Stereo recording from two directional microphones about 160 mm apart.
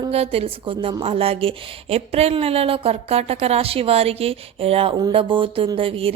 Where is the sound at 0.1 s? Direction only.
40° right (ahead or behind).